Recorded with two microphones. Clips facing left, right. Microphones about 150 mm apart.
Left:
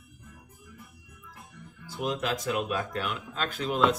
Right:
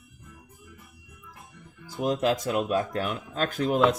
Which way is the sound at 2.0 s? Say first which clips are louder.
Right 5 dB; 45° right (ahead or behind).